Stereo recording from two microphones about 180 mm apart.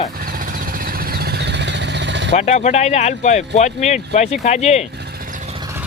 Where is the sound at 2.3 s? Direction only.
40° left (ahead or behind).